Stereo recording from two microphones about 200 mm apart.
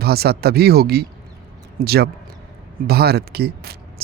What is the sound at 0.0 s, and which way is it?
Speech, 50° right (ahead or behind).